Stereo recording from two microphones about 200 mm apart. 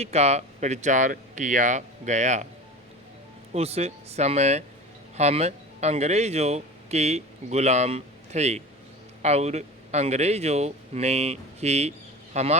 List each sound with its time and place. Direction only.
0.0 s speech: 35° right (ahead or behind)
3.5 s speech: 30° right (ahead or behind)